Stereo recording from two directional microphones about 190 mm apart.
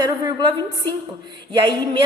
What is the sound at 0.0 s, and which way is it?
Speech, 20° right (ahead or behind).